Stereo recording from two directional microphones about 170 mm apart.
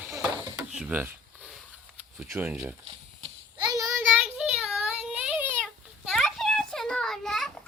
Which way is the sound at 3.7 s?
20° right (ahead or behind).